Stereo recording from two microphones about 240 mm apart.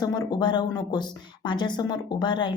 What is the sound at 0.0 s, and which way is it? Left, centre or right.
A woman's voice, centre.